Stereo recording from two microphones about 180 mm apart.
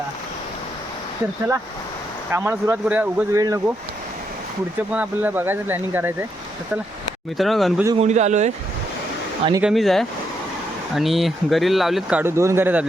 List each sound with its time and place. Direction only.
2.3 s speech: 15° right (ahead or behind)
3.3 s speech: 20° right (ahead or behind)
4.9 s speech: 10° right (ahead or behind)
7.3 s speech: centre (ahead or behind)
7.9 s speech: 40° right (ahead or behind)
9.6 s speech: centre (ahead or behind)
12.2 s speech: 15° right (ahead or behind)